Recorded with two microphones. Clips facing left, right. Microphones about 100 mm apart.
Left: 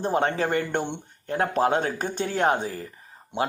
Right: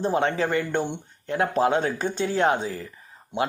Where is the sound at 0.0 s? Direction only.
45° left (ahead or behind).